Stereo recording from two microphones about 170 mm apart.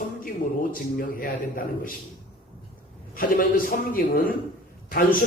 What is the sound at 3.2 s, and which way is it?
A man's voice, 55° left (ahead or behind).